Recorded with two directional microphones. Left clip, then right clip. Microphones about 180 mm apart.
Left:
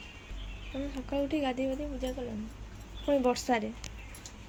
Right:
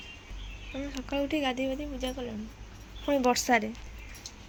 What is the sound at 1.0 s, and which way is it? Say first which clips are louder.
Speech: right 2 dB; 5° right (ahead or behind).